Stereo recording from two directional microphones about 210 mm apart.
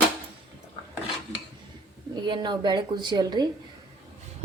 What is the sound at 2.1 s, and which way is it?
A woman's voice, 20° right (ahead or behind).